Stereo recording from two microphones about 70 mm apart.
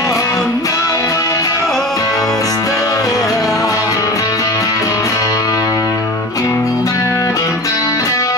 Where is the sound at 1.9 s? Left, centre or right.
Left.